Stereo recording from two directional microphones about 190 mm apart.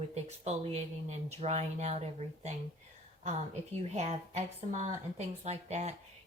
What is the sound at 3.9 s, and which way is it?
Speech, 35° right (ahead or behind).